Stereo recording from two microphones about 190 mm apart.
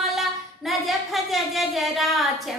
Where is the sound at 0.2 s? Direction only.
Centre (ahead or behind).